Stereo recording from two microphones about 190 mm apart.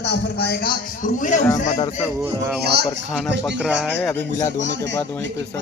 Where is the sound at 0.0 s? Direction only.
60° left (ahead or behind).